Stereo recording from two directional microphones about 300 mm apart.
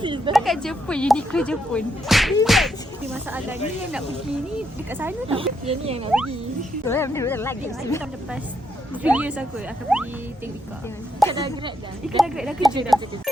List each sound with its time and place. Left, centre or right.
0.0 s a sound: centre
0.3 s speech: centre
4.9 s a woman's voice: centre
5.3 s speech: centre
6.8 s speech: centre
9.0 s speech: centre
11.3 s a woman's voice: centre
12.0 s speech: centre